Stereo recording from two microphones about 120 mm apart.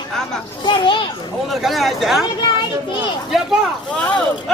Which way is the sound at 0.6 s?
40° left (ahead or behind).